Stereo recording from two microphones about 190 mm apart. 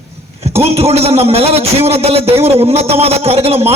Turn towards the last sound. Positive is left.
turn(degrees=-30)  # may be behind; listen again after turning